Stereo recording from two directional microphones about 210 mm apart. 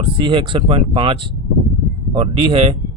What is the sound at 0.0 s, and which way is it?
Speech, 25° right (ahead or behind).